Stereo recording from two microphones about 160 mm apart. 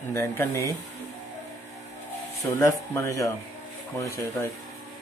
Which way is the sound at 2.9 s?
20° left (ahead or behind).